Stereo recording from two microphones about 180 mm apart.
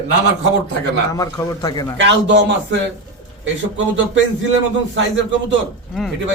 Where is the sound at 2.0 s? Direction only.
80° right.